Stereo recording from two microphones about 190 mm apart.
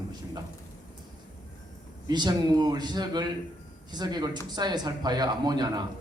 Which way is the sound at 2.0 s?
20° right (ahead or behind).